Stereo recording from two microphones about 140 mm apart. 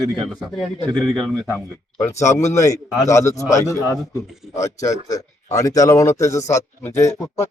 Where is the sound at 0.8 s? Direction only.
5° left (ahead or behind).